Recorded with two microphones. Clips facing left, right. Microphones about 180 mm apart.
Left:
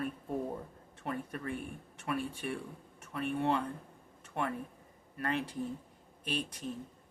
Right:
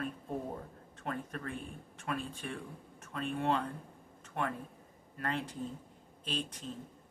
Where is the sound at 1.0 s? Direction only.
15° left (ahead or behind).